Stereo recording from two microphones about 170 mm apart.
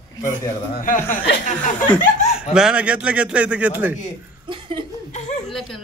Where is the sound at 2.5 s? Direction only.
5° right (ahead or behind).